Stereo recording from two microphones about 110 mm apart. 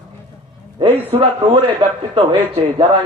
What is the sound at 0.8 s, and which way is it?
A man's voice, 50° right (ahead or behind).